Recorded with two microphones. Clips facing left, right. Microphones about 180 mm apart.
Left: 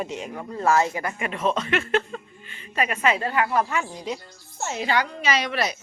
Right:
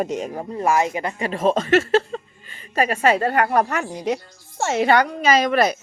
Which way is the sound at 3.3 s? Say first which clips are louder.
Right 4 dB; 60° right (ahead or behind).